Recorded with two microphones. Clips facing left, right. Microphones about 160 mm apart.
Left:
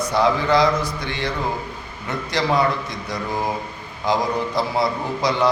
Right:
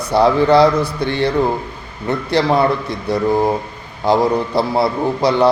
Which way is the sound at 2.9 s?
65° right (ahead or behind).